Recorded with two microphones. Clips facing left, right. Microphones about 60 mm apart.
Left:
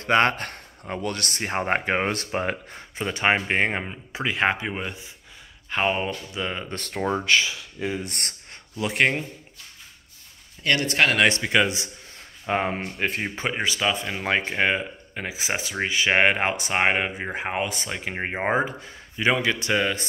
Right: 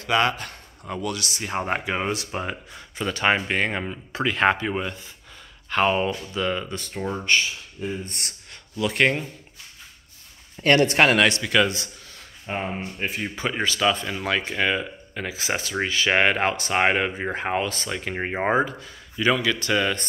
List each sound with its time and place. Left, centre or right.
0.0 s speech: left
0.8 s speech: left
1.1 s speech: left
3.0 s speech: left
6.7 s speech: left
7.8 s speech: left
8.7 s speech: left
10.6 s speech: right
11.2 s speech: left
12.4 s speech: left
13.5 s speech: centre
14.1 s speech: left; by 18.7 s centre
18.7 s speech: left
19.8 s speech: centre